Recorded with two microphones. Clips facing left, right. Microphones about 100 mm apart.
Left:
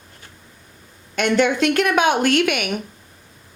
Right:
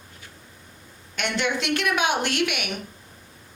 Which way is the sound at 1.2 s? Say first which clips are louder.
Left 9 dB; 45° left (ahead or behind).